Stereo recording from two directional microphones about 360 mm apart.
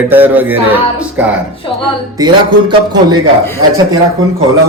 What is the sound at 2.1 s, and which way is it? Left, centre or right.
Music, centre.